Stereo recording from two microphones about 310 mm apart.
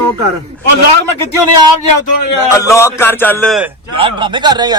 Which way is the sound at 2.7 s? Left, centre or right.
Centre.